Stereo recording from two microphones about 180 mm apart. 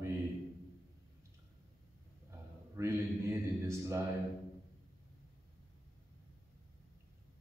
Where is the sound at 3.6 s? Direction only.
15° right (ahead or behind).